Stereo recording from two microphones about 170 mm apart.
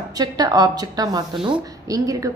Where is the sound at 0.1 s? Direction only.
20° right (ahead or behind).